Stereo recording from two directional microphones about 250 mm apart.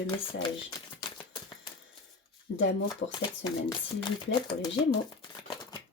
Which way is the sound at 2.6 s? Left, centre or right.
Left.